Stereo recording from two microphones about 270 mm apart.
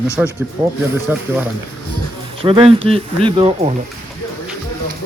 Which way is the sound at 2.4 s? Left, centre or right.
Centre.